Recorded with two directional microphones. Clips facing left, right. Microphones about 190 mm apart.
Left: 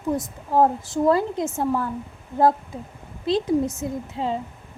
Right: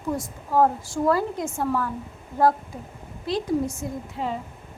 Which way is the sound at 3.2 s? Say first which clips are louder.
Left 3 dB; 25° left (ahead or behind).